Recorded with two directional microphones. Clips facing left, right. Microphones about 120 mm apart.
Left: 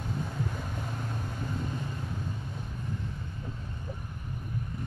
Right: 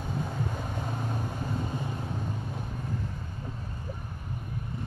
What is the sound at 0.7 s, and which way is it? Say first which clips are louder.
Vehicle: right 3 dB; 30° right (ahead or behind).